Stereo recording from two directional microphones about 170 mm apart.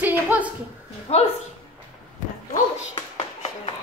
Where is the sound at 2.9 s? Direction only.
30° left (ahead or behind).